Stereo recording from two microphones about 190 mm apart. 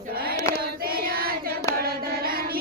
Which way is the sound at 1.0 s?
50° right (ahead or behind).